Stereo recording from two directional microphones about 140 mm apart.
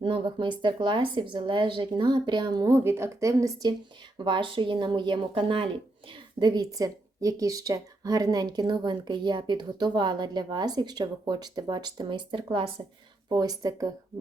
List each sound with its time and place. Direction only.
0.0 s speech: 35° right (ahead or behind)
4.2 s speech: 35° right (ahead or behind)
13.3 s speech: 30° right (ahead or behind)